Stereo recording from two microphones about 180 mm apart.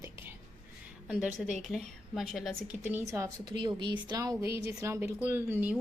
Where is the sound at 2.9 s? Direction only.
15° right (ahead or behind).